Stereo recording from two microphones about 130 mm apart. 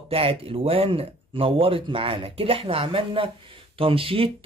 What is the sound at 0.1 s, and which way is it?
Speech, 45° right (ahead or behind).